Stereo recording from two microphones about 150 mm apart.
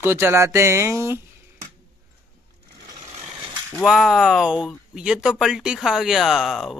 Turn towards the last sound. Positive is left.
turn(degrees=0)  # may be behind; listen again after turning